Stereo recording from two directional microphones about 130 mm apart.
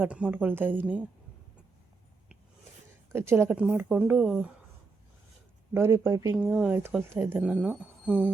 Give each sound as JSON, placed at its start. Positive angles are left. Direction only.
{"t": 0.0, "sound": "speech", "side_deg": -10}
{"t": 3.1, "sound": "speech", "side_deg": -20}
{"t": 5.7, "sound": "speech", "side_deg": -20}